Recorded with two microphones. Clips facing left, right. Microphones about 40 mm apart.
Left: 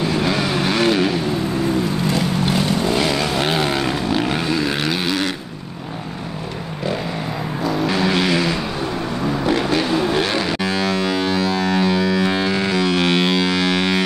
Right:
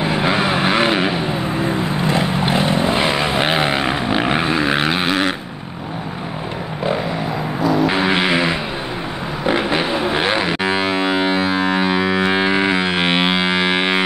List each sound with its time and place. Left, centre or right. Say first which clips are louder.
0.0 s vehicle: right 2 dB; right
7.9 s vehicle: right 1 dB; right
9.5 s a sound: right 2 dB; right